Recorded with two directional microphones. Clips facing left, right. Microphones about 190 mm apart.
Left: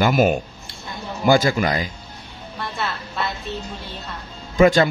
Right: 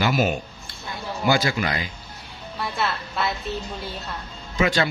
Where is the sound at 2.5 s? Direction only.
Centre (ahead or behind).